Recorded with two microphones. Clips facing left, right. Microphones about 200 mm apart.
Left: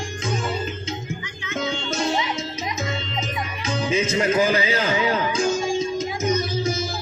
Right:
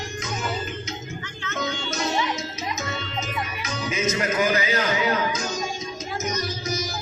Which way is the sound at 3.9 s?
30° left (ahead or behind).